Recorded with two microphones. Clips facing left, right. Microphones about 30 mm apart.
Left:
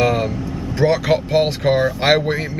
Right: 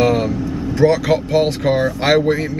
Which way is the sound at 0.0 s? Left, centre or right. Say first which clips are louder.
Right 2 dB; centre.